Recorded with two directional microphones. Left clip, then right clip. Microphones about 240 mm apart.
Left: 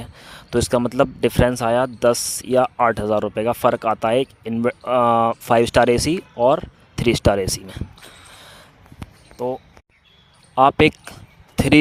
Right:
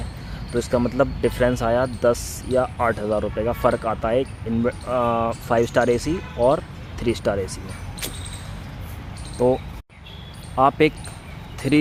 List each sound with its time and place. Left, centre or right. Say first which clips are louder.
0.5 s speech: left 3 dB; left
9.4 s speech: right 6 dB; centre
10.5 s speech: left 3 dB; left
11.5 s a sound: left 5 dB; left